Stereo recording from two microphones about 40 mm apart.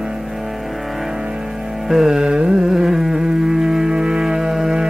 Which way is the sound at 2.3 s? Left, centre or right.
Right.